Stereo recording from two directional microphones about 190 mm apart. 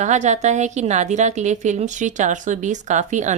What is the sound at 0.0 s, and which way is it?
A woman's voice, 40° right (ahead or behind).